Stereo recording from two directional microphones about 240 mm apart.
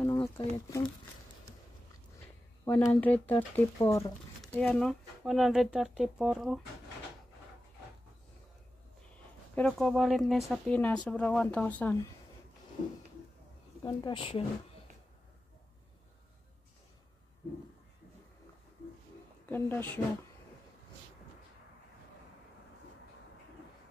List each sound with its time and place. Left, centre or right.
0.0 s a sound: centre
2.6 s speech: centre
9.6 s speech: centre
13.8 s speech: centre
19.5 s speech: centre